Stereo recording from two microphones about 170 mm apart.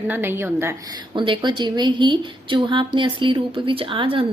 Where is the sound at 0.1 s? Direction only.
15° right (ahead or behind).